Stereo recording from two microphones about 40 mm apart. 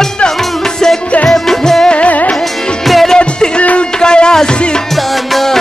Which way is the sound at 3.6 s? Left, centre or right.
Left.